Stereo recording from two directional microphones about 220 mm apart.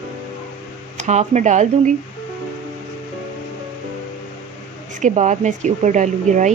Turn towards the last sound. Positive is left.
turn(degrees=-35)  # may be behind; listen again after turning